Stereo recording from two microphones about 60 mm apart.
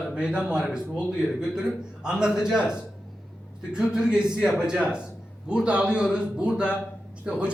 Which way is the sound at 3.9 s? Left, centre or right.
Centre.